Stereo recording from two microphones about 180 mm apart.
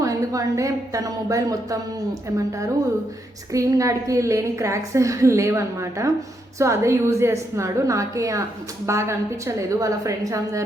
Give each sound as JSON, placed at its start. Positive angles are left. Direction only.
{"t": 0.0, "sound": "a woman's voice", "side_deg": -20}
{"t": 3.5, "sound": "a woman's voice", "side_deg": -15}